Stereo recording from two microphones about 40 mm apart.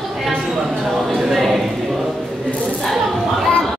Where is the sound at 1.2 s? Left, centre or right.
Centre.